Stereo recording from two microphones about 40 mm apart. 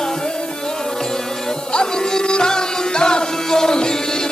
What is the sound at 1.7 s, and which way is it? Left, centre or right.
Music, left.